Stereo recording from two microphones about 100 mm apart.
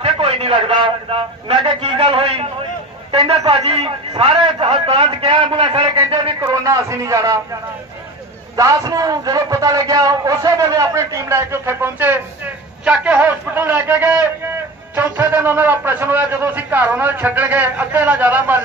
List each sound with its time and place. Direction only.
0.0 s a man's voice: 70° right (ahead or behind)
5.0 s a man's voice: 65° right (ahead or behind)
6.4 s a man's voice: 35° right (ahead or behind)
8.5 s a man's voice: 35° right (ahead or behind)
12.8 s a man's voice: 10° right (ahead or behind)